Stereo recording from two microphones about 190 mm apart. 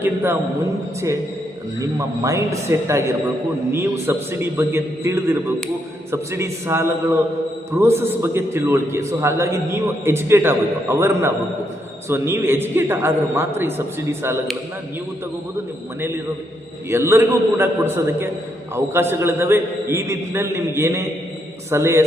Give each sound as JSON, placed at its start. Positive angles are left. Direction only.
{"t": 0.0, "sound": "a man's voice", "side_deg": -10}
{"t": 1.8, "sound": "a man's voice", "side_deg": -15}
{"t": 16.9, "sound": "a man's voice", "side_deg": -15}